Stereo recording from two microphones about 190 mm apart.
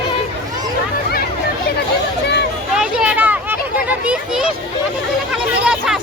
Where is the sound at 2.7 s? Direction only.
5° right (ahead or behind).